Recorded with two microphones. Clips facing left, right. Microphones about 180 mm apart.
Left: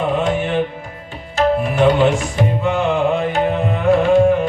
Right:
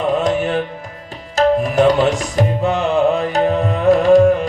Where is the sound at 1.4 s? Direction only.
40° right (ahead or behind).